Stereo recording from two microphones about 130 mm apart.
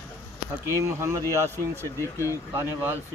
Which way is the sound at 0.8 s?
25° right (ahead or behind).